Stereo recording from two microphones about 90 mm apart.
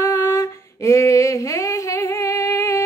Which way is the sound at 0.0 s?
35° left (ahead or behind).